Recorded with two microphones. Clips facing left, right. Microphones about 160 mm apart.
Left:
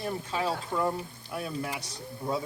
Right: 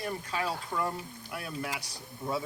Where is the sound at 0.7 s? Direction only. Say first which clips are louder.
Left 4 dB; 10° left (ahead or behind).